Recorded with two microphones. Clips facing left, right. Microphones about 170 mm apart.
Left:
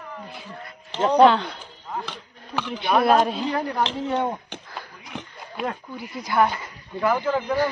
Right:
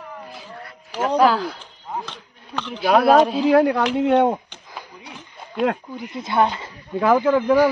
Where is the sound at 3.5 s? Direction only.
80° right.